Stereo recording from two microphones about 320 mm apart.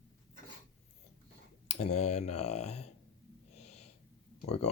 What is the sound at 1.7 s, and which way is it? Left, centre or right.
Speech, left.